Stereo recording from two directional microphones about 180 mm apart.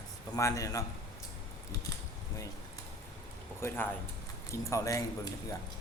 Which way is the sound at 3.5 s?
10° left (ahead or behind).